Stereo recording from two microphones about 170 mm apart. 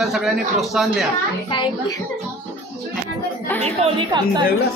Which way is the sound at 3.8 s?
25° right (ahead or behind).